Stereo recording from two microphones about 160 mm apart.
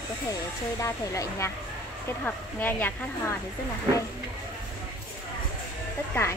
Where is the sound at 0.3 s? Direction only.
20° left (ahead or behind).